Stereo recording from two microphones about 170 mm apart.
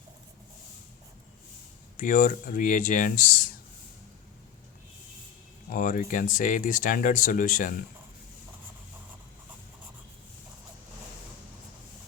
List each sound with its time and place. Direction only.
2.0 s speech: 50° left (ahead or behind)
5.7 s speech: 50° left (ahead or behind)